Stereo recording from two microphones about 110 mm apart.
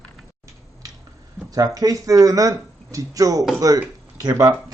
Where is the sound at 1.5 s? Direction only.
35° right (ahead or behind).